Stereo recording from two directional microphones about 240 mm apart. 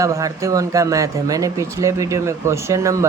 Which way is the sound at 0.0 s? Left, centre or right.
Centre.